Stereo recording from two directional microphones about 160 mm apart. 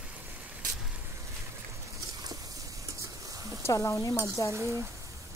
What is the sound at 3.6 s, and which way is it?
Speech, 20° left (ahead or behind).